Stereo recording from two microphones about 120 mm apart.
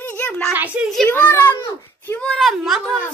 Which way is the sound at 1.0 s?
15° left (ahead or behind).